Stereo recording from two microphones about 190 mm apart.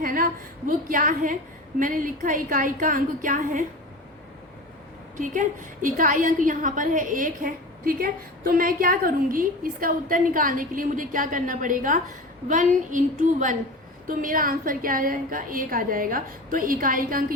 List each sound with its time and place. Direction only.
0.0 s a sound: 50° right (ahead or behind)
0.7 s a woman's voice: 45° right (ahead or behind)
5.1 s a woman's voice: 45° right (ahead or behind)